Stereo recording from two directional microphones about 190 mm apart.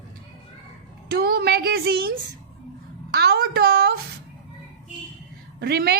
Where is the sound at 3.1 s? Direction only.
55° right (ahead or behind).